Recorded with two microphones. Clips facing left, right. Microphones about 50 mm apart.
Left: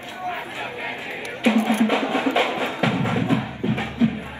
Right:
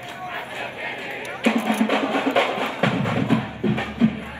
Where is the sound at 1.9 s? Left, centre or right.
Right.